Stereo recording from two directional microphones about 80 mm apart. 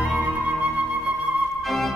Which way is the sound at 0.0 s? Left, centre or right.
Centre.